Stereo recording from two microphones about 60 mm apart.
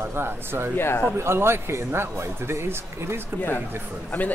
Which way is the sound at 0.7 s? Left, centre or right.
Left.